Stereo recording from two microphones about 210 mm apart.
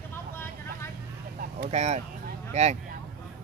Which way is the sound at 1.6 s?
30° right (ahead or behind).